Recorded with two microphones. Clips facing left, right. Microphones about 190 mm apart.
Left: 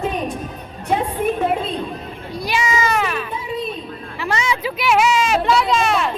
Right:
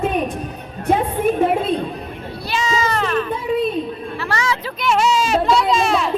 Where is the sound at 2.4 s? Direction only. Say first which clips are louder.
Even; 15° left (ahead or behind).